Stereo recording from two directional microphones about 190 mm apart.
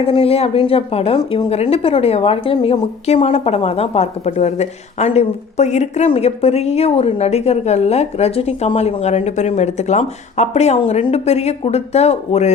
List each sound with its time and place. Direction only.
0.0 s a woman's voice: 30° left (ahead or behind)